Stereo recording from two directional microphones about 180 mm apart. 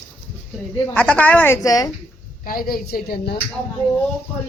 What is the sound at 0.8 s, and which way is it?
A woman's voice, 10° left (ahead or behind).